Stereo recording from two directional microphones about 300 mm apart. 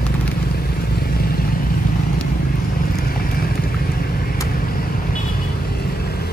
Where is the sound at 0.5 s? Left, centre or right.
Left.